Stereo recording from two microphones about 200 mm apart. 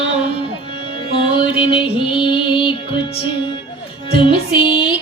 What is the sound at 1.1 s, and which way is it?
Music, 25° left (ahead or behind).